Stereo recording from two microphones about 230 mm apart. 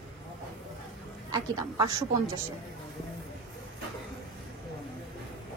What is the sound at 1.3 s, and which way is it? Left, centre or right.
A woman's voice, centre.